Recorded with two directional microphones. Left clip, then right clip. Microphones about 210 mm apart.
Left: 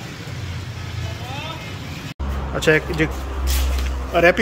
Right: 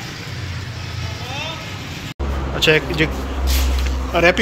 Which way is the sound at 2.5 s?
20° left (ahead or behind).